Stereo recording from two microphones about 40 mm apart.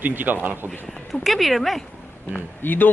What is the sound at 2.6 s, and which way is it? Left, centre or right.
Speech, left.